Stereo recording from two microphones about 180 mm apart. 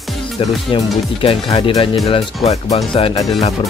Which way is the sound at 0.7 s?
30° left (ahead or behind).